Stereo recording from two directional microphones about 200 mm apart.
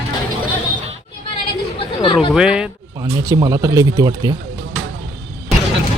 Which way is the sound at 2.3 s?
5° right (ahead or behind).